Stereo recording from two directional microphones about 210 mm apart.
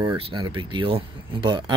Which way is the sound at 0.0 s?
20° right (ahead or behind).